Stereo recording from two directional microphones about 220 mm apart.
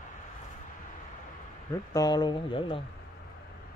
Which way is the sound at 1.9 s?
20° left (ahead or behind).